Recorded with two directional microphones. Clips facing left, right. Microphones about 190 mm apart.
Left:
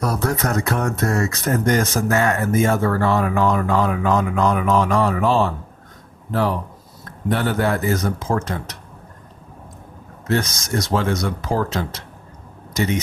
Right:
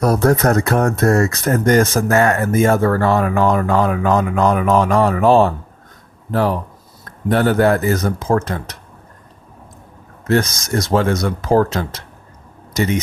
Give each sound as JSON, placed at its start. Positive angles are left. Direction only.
{"t": 0.0, "sound": "speech", "side_deg": -50}
{"t": 7.3, "sound": "speech", "side_deg": -50}
{"t": 10.2, "sound": "speech", "side_deg": -50}